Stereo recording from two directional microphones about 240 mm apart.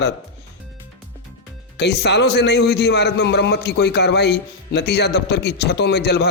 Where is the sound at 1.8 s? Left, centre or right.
Left.